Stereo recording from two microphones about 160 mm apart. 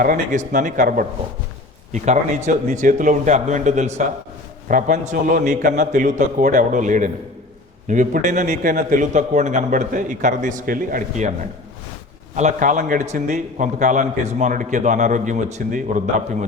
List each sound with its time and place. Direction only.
0.0 s a man's voice: 55° right (ahead or behind)